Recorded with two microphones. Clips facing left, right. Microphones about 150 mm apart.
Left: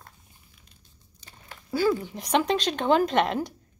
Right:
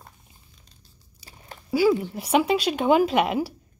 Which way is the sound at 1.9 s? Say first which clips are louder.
Right 3 dB; 10° right (ahead or behind).